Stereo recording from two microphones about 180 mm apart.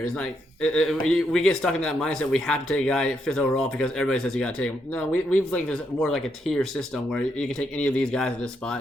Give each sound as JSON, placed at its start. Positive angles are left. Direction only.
{"t": 0.2, "sound": "speech", "side_deg": 5}